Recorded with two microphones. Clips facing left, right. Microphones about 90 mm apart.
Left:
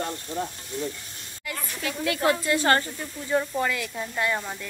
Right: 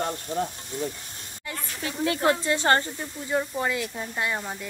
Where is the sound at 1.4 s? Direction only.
25° right (ahead or behind).